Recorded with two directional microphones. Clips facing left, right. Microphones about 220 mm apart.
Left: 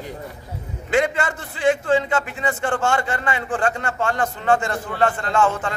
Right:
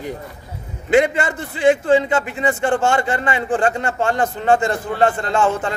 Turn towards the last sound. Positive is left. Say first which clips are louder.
# right 2 dB
turn(degrees=-25)  # may be behind; listen again after turning